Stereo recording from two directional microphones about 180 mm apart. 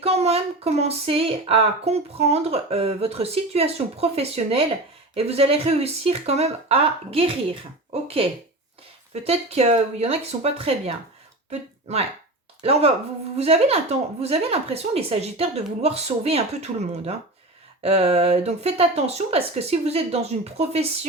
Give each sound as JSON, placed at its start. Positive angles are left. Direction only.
{"t": 0.0, "sound": "speech", "side_deg": -35}
{"t": 17.8, "sound": "speech", "side_deg": -35}